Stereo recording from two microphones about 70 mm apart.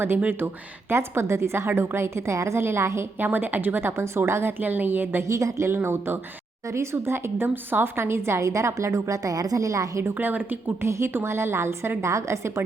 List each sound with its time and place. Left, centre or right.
0.9 s a woman's voice: right
3.2 s a woman's voice: right
5.3 s a woman's voice: right
5.7 s a woman's voice: right
10.0 s a woman's voice: right
10.8 s a woman's voice: right